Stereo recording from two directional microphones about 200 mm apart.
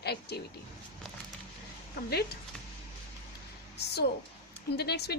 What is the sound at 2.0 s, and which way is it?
Speech, 50° left (ahead or behind).